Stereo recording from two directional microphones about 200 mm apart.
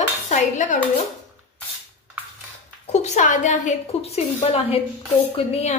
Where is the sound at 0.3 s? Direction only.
40° left (ahead or behind).